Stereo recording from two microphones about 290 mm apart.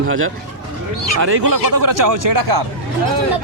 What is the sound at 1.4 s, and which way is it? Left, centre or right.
Speech, right.